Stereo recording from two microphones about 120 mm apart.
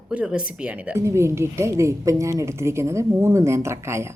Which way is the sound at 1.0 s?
25° right (ahead or behind).